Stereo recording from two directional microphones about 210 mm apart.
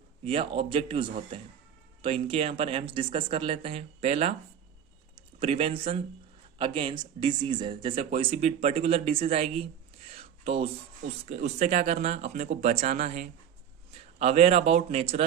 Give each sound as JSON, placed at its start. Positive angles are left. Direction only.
{"t": 0.3, "sound": "speech", "side_deg": -25}
{"t": 5.4, "sound": "speech", "side_deg": -25}
{"t": 10.1, "sound": "a sound", "side_deg": -30}
{"t": 11.3, "sound": "speech", "side_deg": -30}